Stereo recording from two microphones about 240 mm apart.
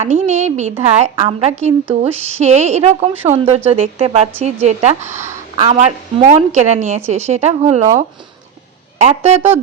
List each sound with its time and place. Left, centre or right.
0.0 s a woman's voice: right
5.1 s speech: centre
5.5 s a woman's voice: right